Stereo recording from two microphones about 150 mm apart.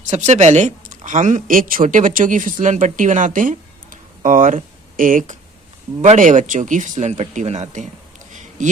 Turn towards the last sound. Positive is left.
turn(degrees=-55)  # may be behind; listen again after turning